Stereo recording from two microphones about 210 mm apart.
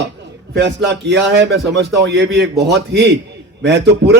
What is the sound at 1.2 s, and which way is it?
A man's voice, 55° right (ahead or behind).